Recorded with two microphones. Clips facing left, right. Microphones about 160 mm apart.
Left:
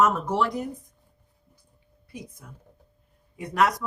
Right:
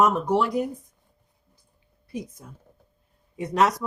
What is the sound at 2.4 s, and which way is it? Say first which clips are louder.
Speech: right 2 dB; 30° right (ahead or behind).